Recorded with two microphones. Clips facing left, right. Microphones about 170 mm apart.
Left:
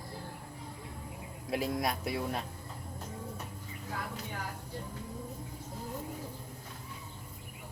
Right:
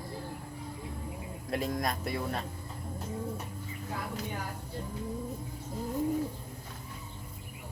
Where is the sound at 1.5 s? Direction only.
5° left (ahead or behind).